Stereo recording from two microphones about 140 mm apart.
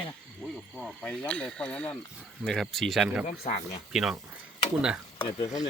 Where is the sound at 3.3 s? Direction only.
55° left (ahead or behind).